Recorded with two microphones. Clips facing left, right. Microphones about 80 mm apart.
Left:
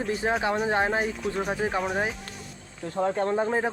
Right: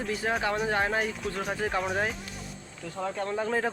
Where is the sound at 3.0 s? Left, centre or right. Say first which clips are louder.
Left 6 dB; left.